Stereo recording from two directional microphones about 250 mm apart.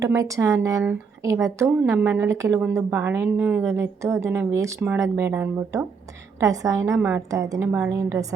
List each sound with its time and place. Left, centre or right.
0.0 s speech: centre